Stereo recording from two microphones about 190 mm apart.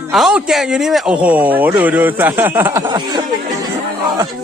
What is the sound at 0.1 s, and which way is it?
A child's voice, 5° right (ahead or behind).